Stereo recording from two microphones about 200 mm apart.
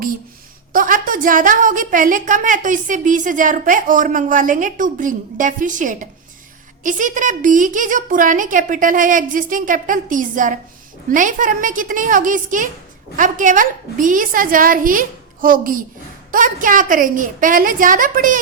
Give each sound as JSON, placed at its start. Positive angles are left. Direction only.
{"t": 0.7, "sound": "a woman's voice", "side_deg": -40}